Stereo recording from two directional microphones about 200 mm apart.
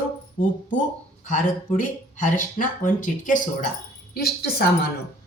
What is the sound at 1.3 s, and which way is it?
Speech, 40° left (ahead or behind).